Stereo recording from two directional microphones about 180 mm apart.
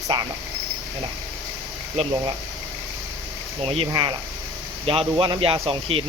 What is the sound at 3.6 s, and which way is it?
Speech, 30° right (ahead or behind).